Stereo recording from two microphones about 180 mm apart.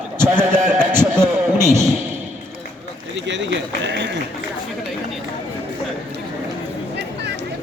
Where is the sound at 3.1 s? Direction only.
85° right.